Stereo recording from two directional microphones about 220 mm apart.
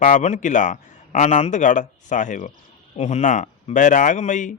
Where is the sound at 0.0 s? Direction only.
35° left (ahead or behind).